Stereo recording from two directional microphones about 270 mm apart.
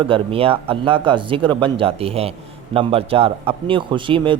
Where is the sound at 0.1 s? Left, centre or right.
Right.